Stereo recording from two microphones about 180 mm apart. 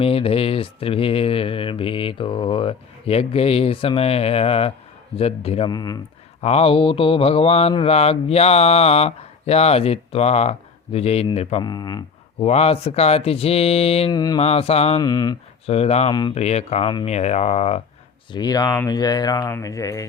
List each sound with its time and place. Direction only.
0.0 s speech: 30° left (ahead or behind)
5.7 s speech: 20° left (ahead or behind)
6.4 s speech: 35° left (ahead or behind)
11.6 s speech: 20° left (ahead or behind)
12.5 s speech: 35° left (ahead or behind)
14.1 s speech: 20° left (ahead or behind)
14.4 s speech: 35° left (ahead or behind)
15.0 s speech: 20° left (ahead or behind)
15.6 s speech: 35° left (ahead or behind)
18.3 s speech: 20° left (ahead or behind)